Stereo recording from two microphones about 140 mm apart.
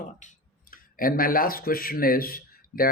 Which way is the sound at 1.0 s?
90° left.